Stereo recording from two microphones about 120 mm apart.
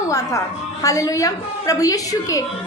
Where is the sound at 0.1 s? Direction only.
25° left (ahead or behind).